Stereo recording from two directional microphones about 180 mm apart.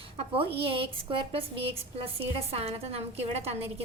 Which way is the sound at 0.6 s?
30° right (ahead or behind).